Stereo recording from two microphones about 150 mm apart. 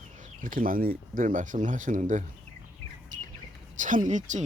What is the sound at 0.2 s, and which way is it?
Speech, 65° right (ahead or behind).